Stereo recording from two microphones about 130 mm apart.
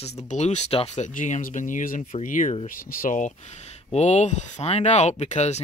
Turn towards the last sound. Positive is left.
turn(degrees=60)  # may be behind; listen again after turning